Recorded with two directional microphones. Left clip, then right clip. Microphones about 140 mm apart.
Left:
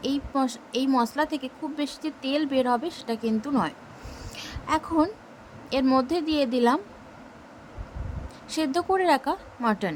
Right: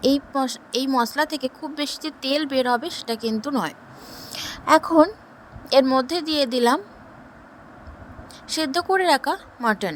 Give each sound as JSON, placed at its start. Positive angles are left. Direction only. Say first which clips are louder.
{"t": 0.0, "sound": "a woman's voice", "louder": "right 6 dB", "side_deg": -40}
{"t": 5.8, "sound": "a woman's voice", "louder": "right 2 dB", "side_deg": -30}
{"t": 6.1, "sound": "speech", "louder": "right 3 dB", "side_deg": -45}
{"t": 8.4, "sound": "a woman's voice", "louder": "right 3 dB", "side_deg": -40}